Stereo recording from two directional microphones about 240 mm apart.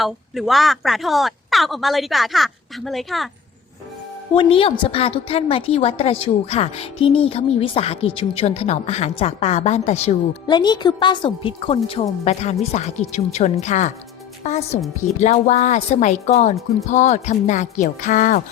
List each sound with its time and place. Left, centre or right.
0.0 s speech: centre
4.4 s a woman's voice: left